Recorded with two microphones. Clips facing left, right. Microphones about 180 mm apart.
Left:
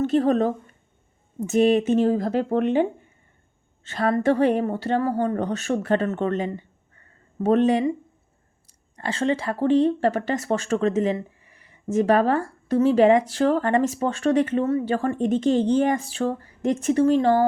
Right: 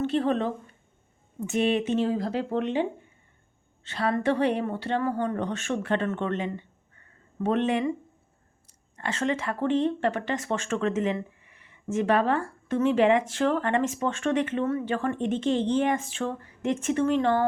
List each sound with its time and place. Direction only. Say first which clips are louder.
0.0 s speech: left 5 dB; 40° left (ahead or behind)
3.8 s speech: left 5 dB; 45° left (ahead or behind)